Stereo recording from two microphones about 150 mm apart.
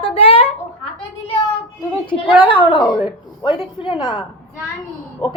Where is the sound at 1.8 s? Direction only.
35° left (ahead or behind).